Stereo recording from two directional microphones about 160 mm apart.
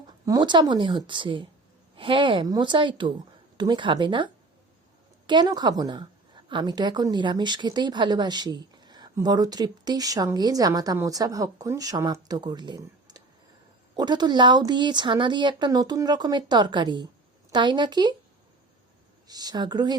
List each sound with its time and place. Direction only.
0.3 s a woman's voice: 25° right (ahead or behind)
19.3 s a woman's voice: 25° right (ahead or behind)